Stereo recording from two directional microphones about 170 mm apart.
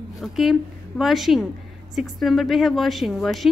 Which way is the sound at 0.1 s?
Centre (ahead or behind).